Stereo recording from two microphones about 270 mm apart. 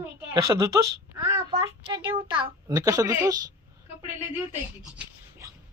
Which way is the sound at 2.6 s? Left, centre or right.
Centre.